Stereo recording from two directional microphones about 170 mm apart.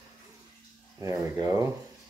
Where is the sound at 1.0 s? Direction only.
20° right (ahead or behind).